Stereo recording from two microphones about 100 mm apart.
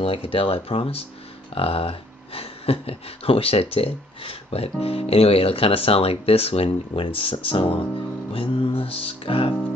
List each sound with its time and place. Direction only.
0.0 s speech: 65° left (ahead or behind)
8.3 s music: 65° left (ahead or behind)